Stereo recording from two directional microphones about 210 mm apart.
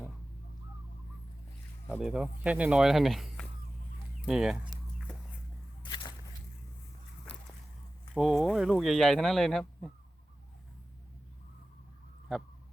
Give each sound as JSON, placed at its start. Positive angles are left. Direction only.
{"t": 2.0, "sound": "speech", "side_deg": -5}
{"t": 5.8, "sound": "a sound", "side_deg": 20}
{"t": 8.1, "sound": "speech", "side_deg": 0}
{"t": 12.3, "sound": "speech", "side_deg": 0}